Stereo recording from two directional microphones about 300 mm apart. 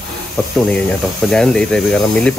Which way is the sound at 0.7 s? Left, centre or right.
Centre.